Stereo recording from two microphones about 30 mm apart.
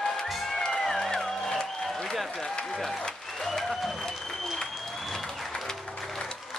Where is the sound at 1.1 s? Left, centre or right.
Centre.